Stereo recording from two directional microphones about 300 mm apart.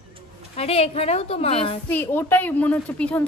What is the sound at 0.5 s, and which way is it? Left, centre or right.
A woman's voice, centre.